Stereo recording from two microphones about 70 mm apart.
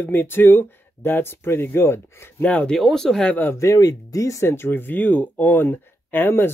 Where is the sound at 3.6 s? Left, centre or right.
Left.